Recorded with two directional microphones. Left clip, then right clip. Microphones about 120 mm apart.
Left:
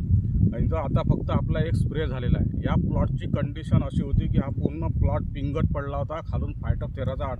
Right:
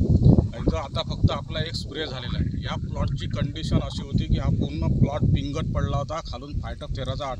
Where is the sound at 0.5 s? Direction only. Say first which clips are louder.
Even; 20° left (ahead or behind).